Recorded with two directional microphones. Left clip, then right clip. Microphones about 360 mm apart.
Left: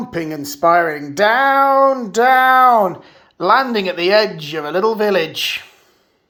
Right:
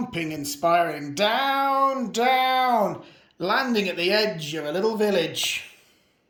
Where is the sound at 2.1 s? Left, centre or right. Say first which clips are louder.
Left 10 dB; centre.